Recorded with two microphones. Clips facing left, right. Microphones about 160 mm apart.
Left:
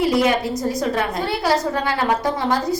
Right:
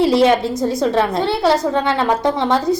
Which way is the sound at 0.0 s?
30° right (ahead or behind).